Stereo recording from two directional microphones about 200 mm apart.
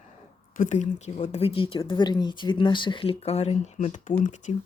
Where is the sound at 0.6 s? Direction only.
35° left (ahead or behind).